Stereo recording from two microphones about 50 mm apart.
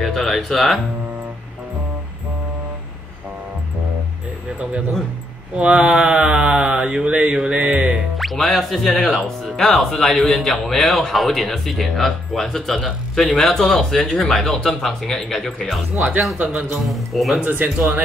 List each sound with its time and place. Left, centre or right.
0.0 s speech: centre
5.6 s mantra: centre
7.5 s music: right
8.2 s speech: centre
16.3 s mantra: right
16.7 s speech: centre
17.4 s mantra: right